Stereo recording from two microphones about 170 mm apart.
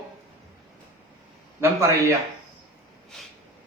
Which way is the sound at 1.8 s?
15° right (ahead or behind).